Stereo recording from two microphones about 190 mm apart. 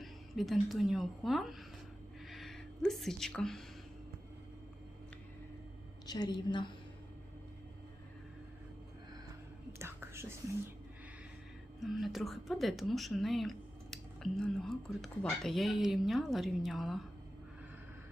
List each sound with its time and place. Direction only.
0.0 s a woman's voice: centre (ahead or behind)
6.1 s a woman's voice: 20° left (ahead or behind)
9.7 s whispering: 15° right (ahead or behind)
11.8 s speech: centre (ahead or behind)